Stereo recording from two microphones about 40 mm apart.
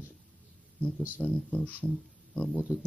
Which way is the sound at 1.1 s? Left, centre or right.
Left.